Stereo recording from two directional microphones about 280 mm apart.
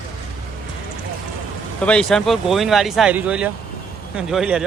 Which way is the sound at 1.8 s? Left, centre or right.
Centre.